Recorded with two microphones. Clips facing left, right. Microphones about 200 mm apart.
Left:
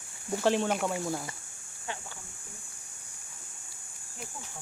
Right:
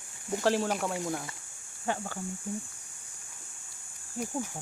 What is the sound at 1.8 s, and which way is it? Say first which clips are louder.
Speech: right 8 dB; 50° right (ahead or behind).